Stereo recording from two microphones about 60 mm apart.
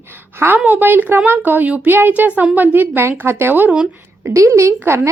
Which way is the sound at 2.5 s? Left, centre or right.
Right.